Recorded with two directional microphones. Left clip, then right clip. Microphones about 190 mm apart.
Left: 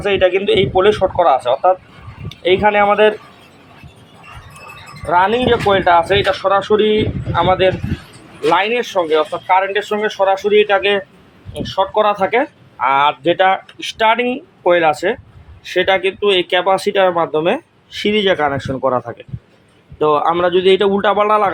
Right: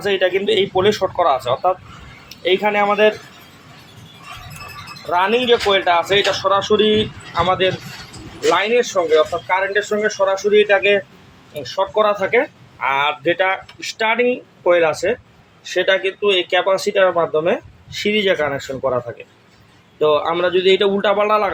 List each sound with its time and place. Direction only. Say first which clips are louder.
0.0 s speech: left 3 dB; 35° left (ahead or behind)
5.0 s speech: left 3 dB; 35° left (ahead or behind)